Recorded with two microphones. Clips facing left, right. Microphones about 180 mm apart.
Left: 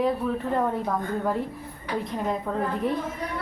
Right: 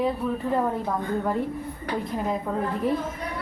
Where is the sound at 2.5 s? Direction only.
5° right (ahead or behind).